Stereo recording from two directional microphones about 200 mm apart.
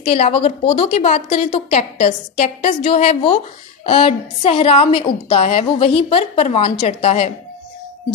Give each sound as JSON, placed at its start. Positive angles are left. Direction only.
{"t": 0.0, "sound": "a woman's voice", "side_deg": 30}